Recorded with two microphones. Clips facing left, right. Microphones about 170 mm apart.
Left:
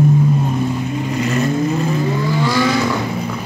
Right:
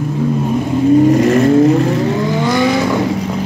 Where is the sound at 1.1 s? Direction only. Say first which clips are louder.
Right 8 dB; 50° right (ahead or behind); by 2.1 s 70° right (ahead or behind).